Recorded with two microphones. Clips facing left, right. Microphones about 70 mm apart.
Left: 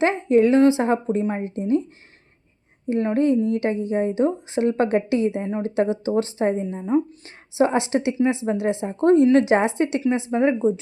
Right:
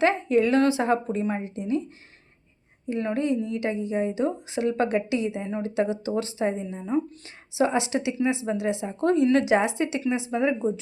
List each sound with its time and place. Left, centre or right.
0.0 s a woman's voice: left
2.9 s a woman's voice: left